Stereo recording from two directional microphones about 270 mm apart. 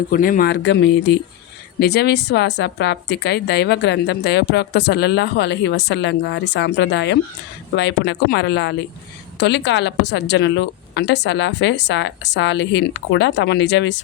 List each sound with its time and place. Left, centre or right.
0.1 s a woman's voice: left